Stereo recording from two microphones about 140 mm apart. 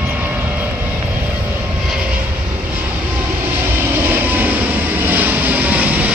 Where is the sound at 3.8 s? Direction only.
15° right (ahead or behind).